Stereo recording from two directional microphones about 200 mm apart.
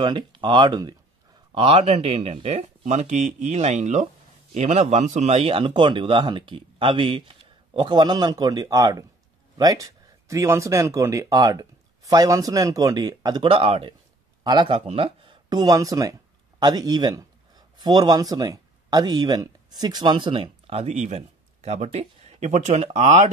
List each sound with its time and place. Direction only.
0.0 s speech: 25° right (ahead or behind)